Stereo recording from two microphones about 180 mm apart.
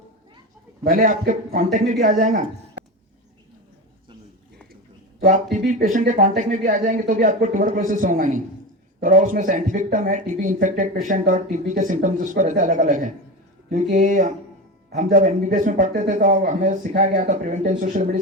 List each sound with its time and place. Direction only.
0.9 s speech: 50° right (ahead or behind)
5.3 s speech: 45° right (ahead or behind)
15.4 s speech: 45° right (ahead or behind)